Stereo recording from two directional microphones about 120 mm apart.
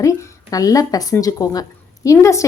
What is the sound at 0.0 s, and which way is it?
A woman's voice, 25° left (ahead or behind).